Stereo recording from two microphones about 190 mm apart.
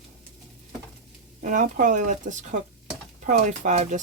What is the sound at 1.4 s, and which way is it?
Speech, 40° right (ahead or behind).